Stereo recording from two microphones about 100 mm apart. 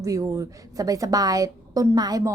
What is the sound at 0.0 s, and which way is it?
A woman's voice, 35° right (ahead or behind).